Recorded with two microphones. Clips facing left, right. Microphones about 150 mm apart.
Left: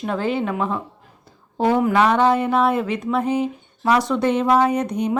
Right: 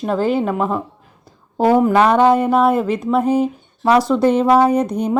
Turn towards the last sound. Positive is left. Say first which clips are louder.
# right 4 dB
turn(degrees=-35)  # may be behind; listen again after turning